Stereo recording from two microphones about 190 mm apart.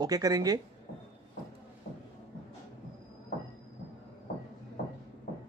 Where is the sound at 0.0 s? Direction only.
20° right (ahead or behind).